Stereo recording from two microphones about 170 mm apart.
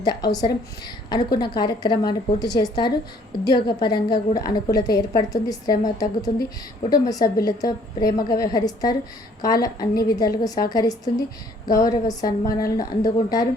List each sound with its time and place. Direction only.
0.0 s a woman's voice: 25° left (ahead or behind)
9.9 s a woman's voice: 65° left (ahead or behind)
10.2 s a woman's voice: 20° left (ahead or behind)